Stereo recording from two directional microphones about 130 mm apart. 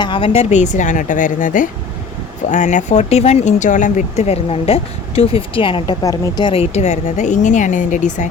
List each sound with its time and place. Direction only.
0.0 s a woman's voice: 35° left (ahead or behind)
0.3 s a woman's voice: 65° left (ahead or behind); by 1.7 s 85° left
2.5 s speech: 70° left (ahead or behind); by 6.5 s 30° left (ahead or behind)
6.5 s speech: 55° left (ahead or behind); by 8.3 s 75° left (ahead or behind)